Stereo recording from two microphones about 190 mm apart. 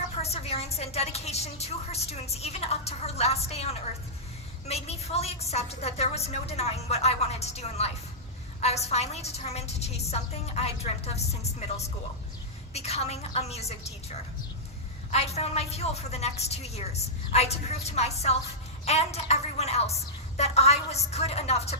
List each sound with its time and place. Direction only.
0.2 s a woman's voice: 35° left (ahead or behind)
12.7 s a woman's voice: 35° left (ahead or behind)